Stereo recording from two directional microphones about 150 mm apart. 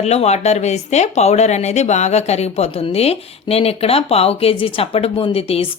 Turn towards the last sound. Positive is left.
turn(degrees=40)  # may be behind; listen again after turning